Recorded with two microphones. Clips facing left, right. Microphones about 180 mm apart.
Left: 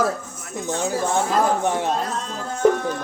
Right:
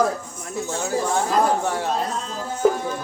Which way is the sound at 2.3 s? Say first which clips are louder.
Left 2 dB; 5° right (ahead or behind).